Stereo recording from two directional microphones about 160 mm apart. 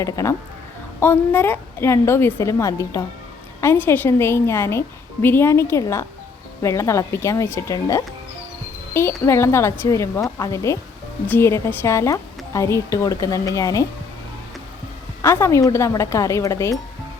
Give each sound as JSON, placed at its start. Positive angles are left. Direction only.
{"t": 0.0, "sound": "a woman's voice", "side_deg": 20}
{"t": 15.2, "sound": "a woman's voice", "side_deg": 15}